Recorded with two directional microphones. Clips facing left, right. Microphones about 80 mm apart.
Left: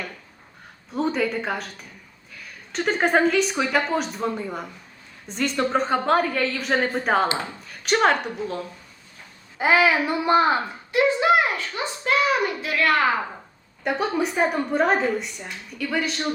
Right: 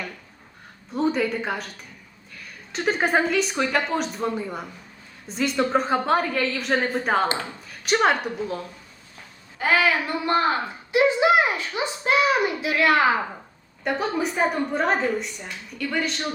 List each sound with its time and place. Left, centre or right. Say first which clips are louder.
0.9 s a woman's voice: right 1 dB; centre
9.6 s a woman's voice: left 2 dB; centre
10.9 s a child's voice: right 1 dB; centre
13.8 s a woman's voice: left 1 dB; centre